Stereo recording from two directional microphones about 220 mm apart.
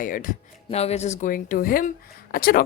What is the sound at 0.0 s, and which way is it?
A woman's voice, 40° left (ahead or behind).